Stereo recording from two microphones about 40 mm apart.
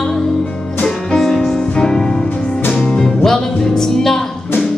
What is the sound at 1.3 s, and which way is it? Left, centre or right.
Music, centre.